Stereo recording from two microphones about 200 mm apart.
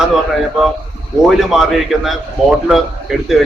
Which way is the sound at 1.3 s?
Centre (ahead or behind).